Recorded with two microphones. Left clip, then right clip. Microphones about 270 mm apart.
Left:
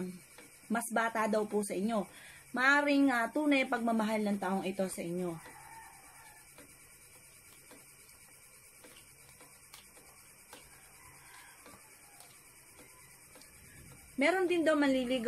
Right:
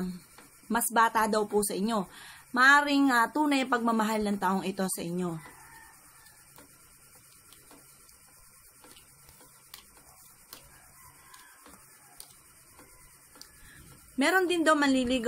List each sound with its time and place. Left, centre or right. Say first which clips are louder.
0.7 s a woman's voice: right 8 dB; right
14.1 s a woman's voice: right 4 dB; right